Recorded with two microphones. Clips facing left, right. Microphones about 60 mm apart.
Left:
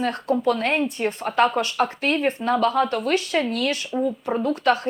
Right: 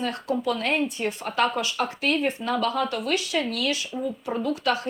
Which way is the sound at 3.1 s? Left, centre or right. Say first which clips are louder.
Left 4 dB; left.